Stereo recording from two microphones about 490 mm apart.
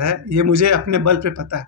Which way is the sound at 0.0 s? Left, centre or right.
Right.